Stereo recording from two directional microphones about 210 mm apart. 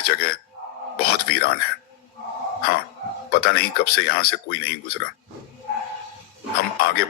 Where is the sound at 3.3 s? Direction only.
45° left (ahead or behind).